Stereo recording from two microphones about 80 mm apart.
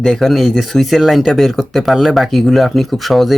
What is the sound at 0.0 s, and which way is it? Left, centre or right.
Speech, centre.